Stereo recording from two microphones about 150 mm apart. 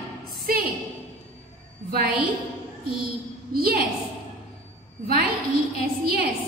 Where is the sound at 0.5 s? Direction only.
75° right (ahead or behind).